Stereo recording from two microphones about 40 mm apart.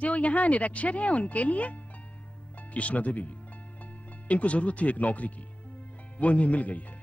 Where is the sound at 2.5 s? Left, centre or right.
Left.